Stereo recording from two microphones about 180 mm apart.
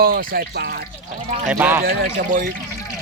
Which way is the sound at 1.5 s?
10° right (ahead or behind).